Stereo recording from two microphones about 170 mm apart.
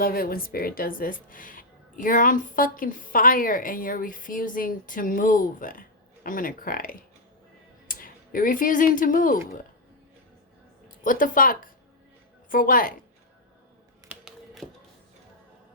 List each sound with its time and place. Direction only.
0.0 s speech: 60° left (ahead or behind)
10.8 s speech: 50° left (ahead or behind)
14.1 s a sound: centre (ahead or behind)